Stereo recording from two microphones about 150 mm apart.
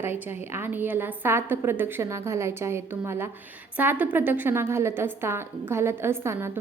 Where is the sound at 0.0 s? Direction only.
15° right (ahead or behind).